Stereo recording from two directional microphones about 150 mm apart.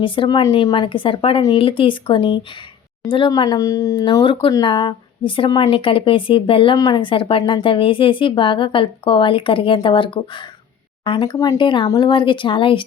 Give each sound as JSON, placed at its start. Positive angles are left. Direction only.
{"t": 0.0, "sound": "a woman's voice", "side_deg": 35}